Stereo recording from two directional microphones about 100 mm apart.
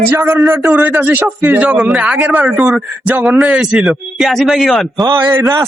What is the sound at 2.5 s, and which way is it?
A man's voice, 5° right (ahead or behind).